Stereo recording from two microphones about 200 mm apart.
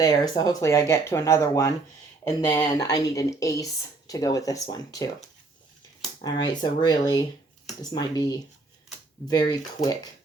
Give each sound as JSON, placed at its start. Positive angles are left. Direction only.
{"t": 0.0, "sound": "speech", "side_deg": 20}
{"t": 6.5, "sound": "speech", "side_deg": 20}